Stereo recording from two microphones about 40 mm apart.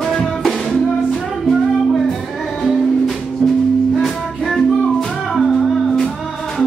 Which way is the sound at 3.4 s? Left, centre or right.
Centre.